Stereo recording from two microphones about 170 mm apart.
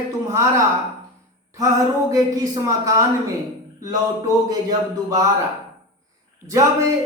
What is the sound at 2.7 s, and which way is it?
Speech, 20° right (ahead or behind).